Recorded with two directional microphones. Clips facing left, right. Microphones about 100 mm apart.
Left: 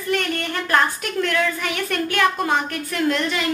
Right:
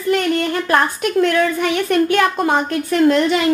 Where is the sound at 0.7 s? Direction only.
25° right (ahead or behind).